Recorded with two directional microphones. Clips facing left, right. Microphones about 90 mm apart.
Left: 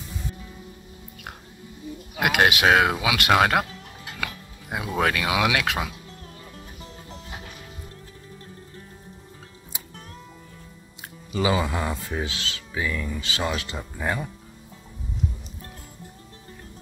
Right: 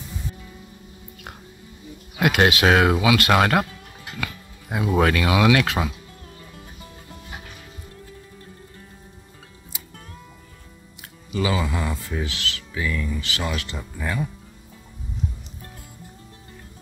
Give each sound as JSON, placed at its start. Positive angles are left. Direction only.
{"t": 2.1, "sound": "speech", "side_deg": 10}
{"t": 4.2, "sound": "music", "side_deg": 10}
{"t": 4.8, "sound": "speech", "side_deg": 0}
{"t": 11.0, "sound": "speech", "side_deg": 25}